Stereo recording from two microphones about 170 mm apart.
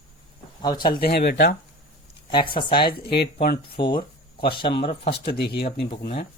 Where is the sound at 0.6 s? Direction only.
25° left (ahead or behind).